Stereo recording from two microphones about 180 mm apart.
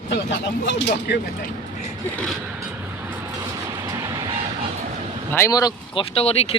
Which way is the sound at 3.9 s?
15° right (ahead or behind).